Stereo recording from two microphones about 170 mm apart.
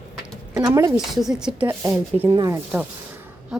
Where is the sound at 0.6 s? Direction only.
20° right (ahead or behind).